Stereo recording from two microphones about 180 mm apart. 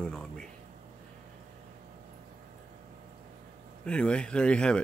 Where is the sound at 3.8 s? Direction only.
5° left (ahead or behind).